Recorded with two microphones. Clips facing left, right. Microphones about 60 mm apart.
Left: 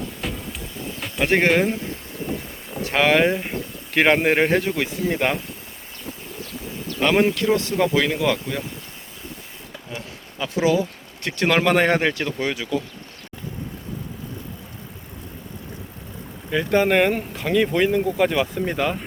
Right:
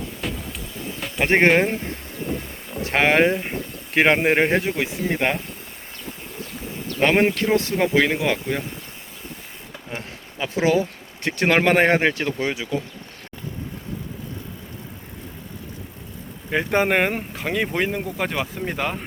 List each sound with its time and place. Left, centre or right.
0.2 s music: centre
1.2 s speech: right
2.8 s speech: right
3.2 s speech: centre
3.9 s speech: centre
7.0 s speech: right
10.3 s speech: right
16.5 s speech: right; by 18.9 s centre